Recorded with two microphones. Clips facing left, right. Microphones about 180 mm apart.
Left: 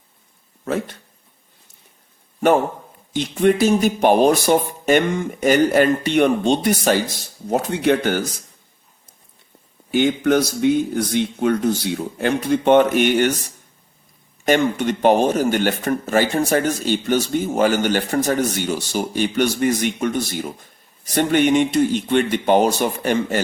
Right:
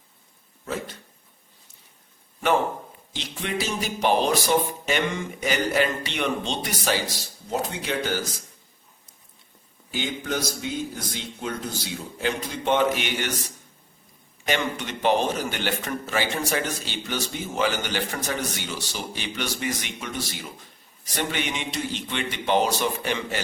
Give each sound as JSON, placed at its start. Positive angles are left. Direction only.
{"t": 0.6, "sound": "speech", "side_deg": 60}
{"t": 3.1, "sound": "a man's voice", "side_deg": 50}
{"t": 9.9, "sound": "a man's voice", "side_deg": 60}